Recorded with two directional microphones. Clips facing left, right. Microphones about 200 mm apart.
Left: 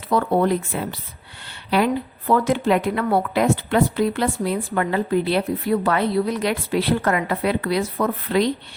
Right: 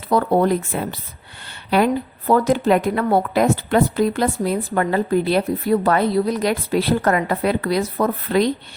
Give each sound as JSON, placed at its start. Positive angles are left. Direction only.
{"t": 0.1, "sound": "a woman's voice", "side_deg": -40}